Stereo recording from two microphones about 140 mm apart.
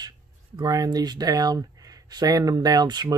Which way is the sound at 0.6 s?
30° right (ahead or behind).